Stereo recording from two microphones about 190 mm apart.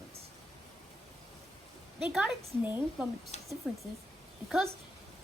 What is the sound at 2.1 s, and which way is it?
A woman's voice, 5° right (ahead or behind).